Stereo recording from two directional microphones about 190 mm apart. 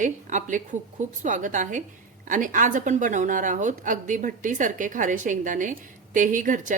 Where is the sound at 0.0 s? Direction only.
40° right (ahead or behind).